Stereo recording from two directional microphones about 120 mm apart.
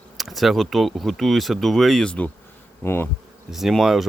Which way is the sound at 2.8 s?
20° left (ahead or behind).